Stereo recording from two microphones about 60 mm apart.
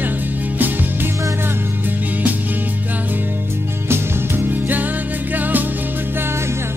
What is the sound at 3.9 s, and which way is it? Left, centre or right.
Music, right.